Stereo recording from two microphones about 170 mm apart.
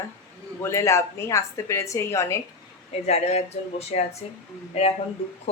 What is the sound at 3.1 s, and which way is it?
Speech, 40° left (ahead or behind).